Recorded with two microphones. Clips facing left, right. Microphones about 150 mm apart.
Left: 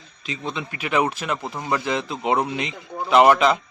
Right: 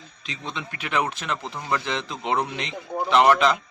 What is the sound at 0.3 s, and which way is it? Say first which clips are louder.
A man's voice: left 4 dB; 5° left (ahead or behind).